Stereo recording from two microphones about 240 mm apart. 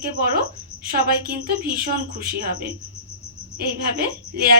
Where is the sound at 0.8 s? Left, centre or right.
Right.